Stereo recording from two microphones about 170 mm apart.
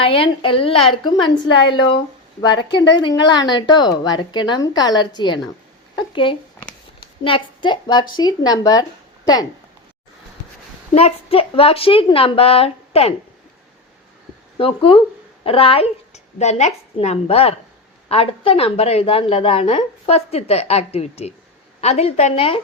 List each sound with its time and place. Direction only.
0.0 s a woman's voice: 30° left (ahead or behind)
2.4 s a woman's voice: 25° left (ahead or behind)
10.9 s a woman's voice: 35° left (ahead or behind)
14.6 s a woman's voice: 30° left (ahead or behind)